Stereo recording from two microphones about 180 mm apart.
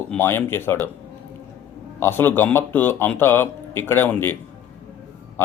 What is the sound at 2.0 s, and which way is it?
Speech, 15° left (ahead or behind).